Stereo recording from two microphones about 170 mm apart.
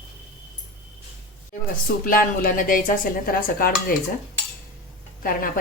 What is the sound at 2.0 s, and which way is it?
Speech, 55° left (ahead or behind).